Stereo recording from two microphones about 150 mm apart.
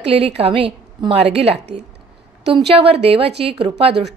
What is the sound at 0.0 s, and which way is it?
A woman's voice, 40° right (ahead or behind).